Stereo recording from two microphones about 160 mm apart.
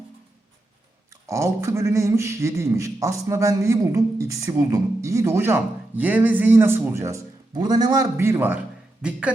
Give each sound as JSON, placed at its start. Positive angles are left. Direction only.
{"t": 1.3, "sound": "speech", "side_deg": -15}
{"t": 8.1, "sound": "a man's voice", "side_deg": -15}